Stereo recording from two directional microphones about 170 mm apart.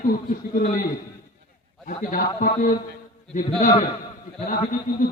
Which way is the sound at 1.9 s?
50° left (ahead or behind).